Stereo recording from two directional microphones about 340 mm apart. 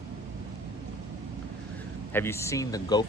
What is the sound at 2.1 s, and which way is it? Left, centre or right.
Speech, centre.